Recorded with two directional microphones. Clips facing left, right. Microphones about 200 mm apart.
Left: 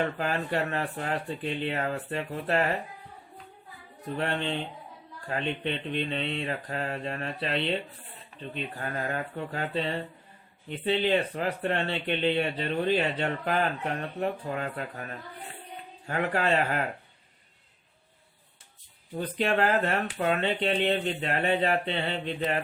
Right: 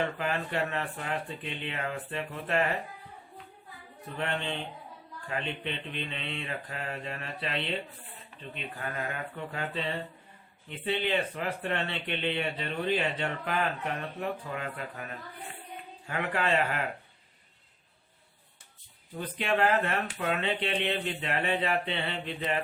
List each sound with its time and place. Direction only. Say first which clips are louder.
0.2 s speech: left 2 dB; 40° left (ahead or behind)
4.2 s speech: left 3 dB; 35° left (ahead or behind)
16.0 s speech: left 3 dB; 40° left (ahead or behind)
19.1 s speech: left 3 dB; 40° left (ahead or behind)